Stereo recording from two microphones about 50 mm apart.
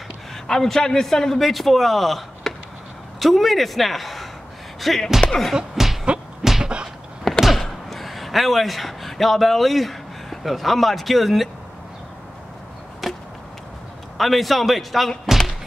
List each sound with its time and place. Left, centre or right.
0.5 s a man's voice: centre
5.5 s music: centre
6.6 s a sound: centre
7.4 s speech: centre
13.0 s chop: centre
14.1 s speech: centre